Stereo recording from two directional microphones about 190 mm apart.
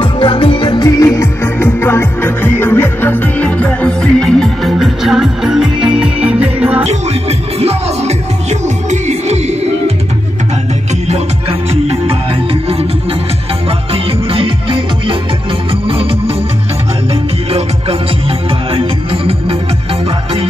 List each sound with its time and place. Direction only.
0.0 s music: 25° left (ahead or behind); by 6.9 s 5° right (ahead or behind)
6.9 s music: 35° right (ahead or behind)
11.1 s music: 35° right (ahead or behind)
13.7 s music: 30° right (ahead or behind)